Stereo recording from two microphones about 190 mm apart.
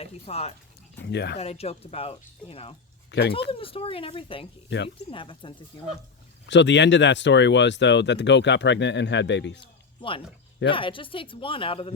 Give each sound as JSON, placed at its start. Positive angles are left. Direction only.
{"t": 0.0, "sound": "speech", "side_deg": 35}
{"t": 1.0, "sound": "speech", "side_deg": 60}
{"t": 1.4, "sound": "speech", "side_deg": 35}
{"t": 3.1, "sound": "speech", "side_deg": 60}
{"t": 3.5, "sound": "speech", "side_deg": 30}
{"t": 6.5, "sound": "speech", "side_deg": 70}
{"t": 9.6, "sound": "speech", "side_deg": 25}